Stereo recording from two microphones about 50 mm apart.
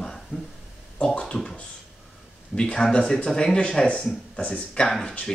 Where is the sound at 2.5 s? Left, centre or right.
Centre.